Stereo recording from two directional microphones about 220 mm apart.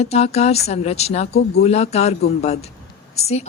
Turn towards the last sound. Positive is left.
turn(degrees=30)  # may be behind; listen again after turning